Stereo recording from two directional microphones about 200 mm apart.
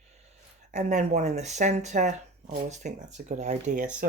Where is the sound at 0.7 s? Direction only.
35° right (ahead or behind).